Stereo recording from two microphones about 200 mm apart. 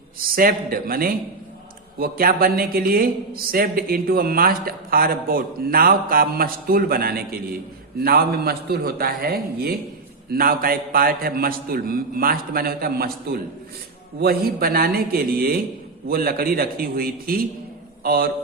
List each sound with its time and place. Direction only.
0.2 s a man's voice: 45° right (ahead or behind)